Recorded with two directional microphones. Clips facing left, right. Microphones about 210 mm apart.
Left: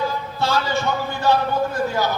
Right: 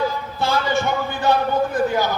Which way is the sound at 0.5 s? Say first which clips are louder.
Right 2 dB; 15° right (ahead or behind).